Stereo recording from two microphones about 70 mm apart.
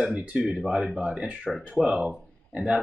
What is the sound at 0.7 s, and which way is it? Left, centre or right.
Speech, centre.